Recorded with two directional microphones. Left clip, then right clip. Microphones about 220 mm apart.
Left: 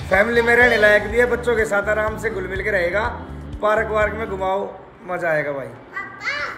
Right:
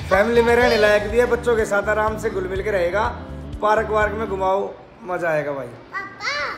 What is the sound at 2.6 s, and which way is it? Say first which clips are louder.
Speech: left 1 dB; 20° right (ahead or behind).